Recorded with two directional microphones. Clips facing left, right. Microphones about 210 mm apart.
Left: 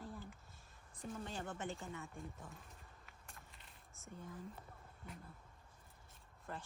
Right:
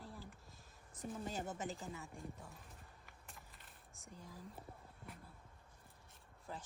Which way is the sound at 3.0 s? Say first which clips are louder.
Right 1 dB; centre (ahead or behind).